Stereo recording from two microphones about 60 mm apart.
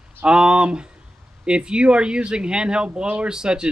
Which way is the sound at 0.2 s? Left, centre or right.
Centre.